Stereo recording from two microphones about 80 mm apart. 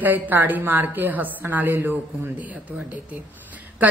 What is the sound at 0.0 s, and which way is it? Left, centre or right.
A woman's voice, right.